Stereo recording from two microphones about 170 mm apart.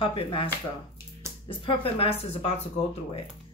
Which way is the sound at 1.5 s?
35° left (ahead or behind).